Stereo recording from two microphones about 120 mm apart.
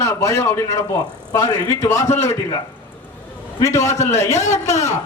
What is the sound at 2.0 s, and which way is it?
Speech, 70° left (ahead or behind).